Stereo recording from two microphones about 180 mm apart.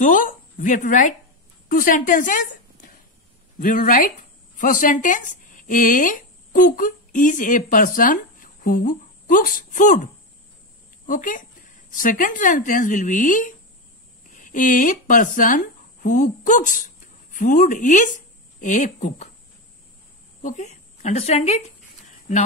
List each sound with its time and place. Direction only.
0.0 s speech: 45° left (ahead or behind)
11.1 s speech: 45° left (ahead or behind)
20.4 s a sound: 40° left (ahead or behind)